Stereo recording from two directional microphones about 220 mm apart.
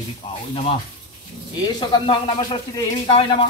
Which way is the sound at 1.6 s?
20° left (ahead or behind).